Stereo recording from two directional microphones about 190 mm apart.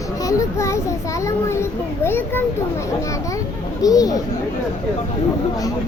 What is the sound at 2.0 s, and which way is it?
Speech, 10° left (ahead or behind).